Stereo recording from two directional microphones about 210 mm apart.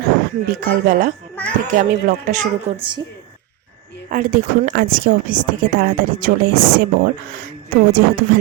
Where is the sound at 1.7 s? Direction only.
35° right (ahead or behind).